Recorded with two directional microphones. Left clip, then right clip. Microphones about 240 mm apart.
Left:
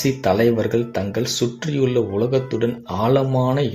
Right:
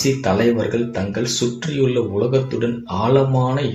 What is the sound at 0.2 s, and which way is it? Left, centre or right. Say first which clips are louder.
Speech: even; left.